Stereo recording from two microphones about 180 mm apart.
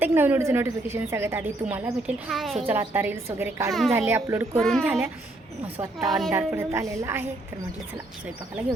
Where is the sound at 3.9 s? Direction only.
15° right (ahead or behind).